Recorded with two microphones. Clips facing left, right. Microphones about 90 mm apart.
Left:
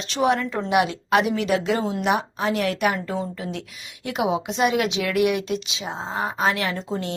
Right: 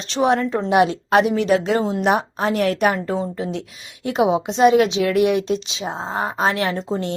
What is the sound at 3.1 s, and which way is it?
A woman's voice, 25° right (ahead or behind).